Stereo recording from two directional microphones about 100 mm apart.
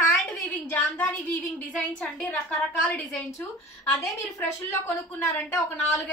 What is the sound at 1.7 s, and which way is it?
A woman's voice, 10° left (ahead or behind).